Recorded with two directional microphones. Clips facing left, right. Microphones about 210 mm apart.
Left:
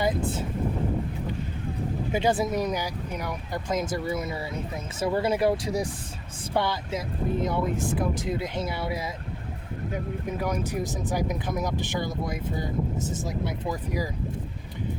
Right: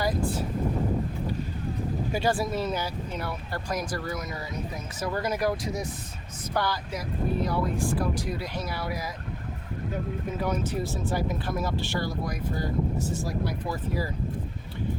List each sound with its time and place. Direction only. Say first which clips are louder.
0.0 s speech: left 1 dB; 25° left (ahead or behind)
2.1 s speech: left 3 dB; 20° left (ahead or behind)
10.2 s speech: even; 10° left (ahead or behind)